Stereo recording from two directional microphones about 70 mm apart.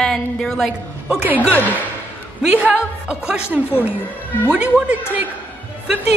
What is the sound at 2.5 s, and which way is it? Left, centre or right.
Speech, centre.